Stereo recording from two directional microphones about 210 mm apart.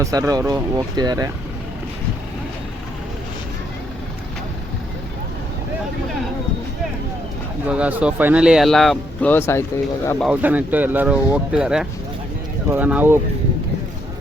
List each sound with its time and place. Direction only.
0.0 s speech: 15° right (ahead or behind)
7.7 s speech: 5° right (ahead or behind); by 9.6 s 10° left (ahead or behind)
10.2 s speech: 5° right (ahead or behind)